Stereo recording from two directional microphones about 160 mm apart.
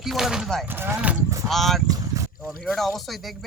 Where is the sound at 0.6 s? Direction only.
15° right (ahead or behind).